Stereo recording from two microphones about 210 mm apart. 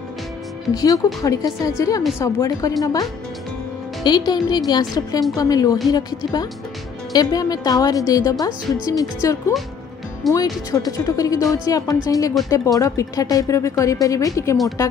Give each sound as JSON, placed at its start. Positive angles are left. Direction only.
{"t": 0.7, "sound": "a woman's voice", "side_deg": 15}